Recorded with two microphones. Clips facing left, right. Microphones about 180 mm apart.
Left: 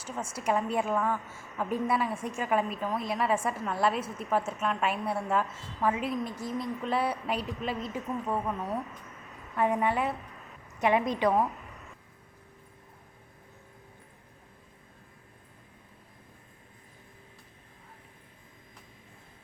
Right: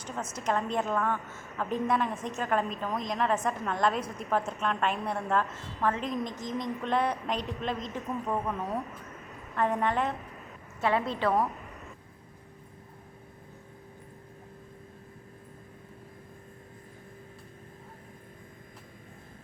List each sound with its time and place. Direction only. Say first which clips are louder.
0.0 s a woman's voice: left 1 dB; 10° left (ahead or behind)
9.6 s a woman's voice: left 1 dB; 10° left (ahead or behind)